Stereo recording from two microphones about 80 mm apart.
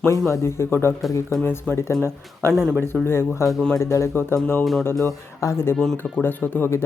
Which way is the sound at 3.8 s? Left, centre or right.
Left.